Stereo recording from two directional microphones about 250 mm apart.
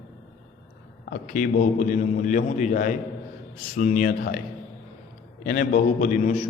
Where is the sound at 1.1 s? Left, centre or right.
Left.